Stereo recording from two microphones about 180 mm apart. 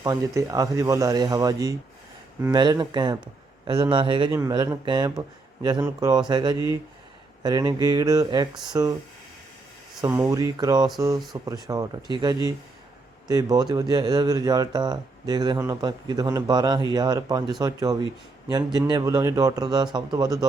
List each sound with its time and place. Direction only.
0.0 s speech: 20° right (ahead or behind)
10.1 s speech: 15° right (ahead or behind)